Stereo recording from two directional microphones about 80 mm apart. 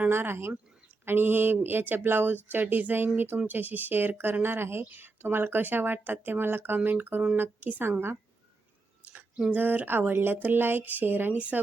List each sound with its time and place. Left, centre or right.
0.1 s speech: right
9.5 s speech: right